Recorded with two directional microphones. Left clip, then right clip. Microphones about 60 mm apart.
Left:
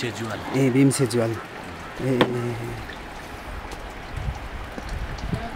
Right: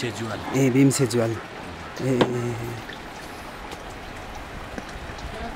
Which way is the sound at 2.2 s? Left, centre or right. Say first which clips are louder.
Left 1 dB; left.